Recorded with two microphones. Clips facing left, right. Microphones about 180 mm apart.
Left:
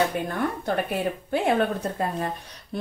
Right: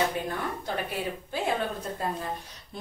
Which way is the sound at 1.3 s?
65° left (ahead or behind).